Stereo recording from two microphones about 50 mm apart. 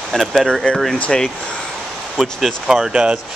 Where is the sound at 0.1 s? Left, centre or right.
Centre.